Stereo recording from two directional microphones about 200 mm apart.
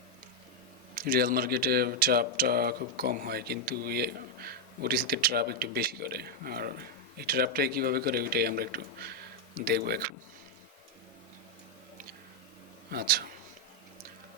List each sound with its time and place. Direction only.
0.9 s speech: 45° right (ahead or behind)
12.9 s speech: 50° right (ahead or behind)